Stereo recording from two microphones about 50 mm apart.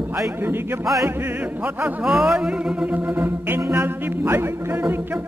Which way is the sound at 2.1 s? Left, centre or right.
Centre.